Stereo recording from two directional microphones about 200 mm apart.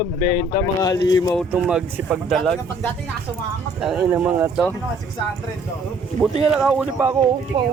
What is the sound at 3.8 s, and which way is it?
Speech, 5° right (ahead or behind).